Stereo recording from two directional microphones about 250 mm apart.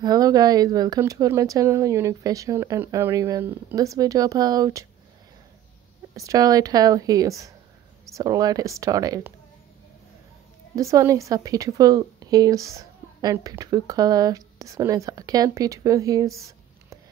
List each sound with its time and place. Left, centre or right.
0.0 s a woman's voice: centre
6.1 s a woman's voice: centre
10.8 s a woman's voice: centre
16.3 s a sound: centre